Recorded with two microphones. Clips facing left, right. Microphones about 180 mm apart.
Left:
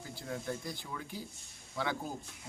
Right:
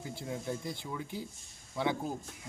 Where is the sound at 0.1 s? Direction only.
25° right (ahead or behind).